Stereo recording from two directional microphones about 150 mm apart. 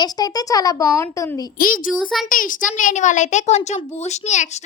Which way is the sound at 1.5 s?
70° left (ahead or behind).